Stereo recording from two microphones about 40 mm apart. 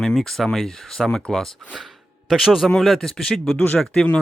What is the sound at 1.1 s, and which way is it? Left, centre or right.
Speech, centre.